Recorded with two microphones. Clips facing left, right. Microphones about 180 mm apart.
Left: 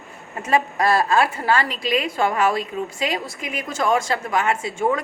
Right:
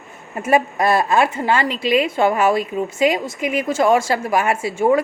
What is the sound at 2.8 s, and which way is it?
A woman's voice, 25° right (ahead or behind).